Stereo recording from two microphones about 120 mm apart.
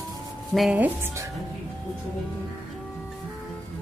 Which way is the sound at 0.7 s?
15° right (ahead or behind).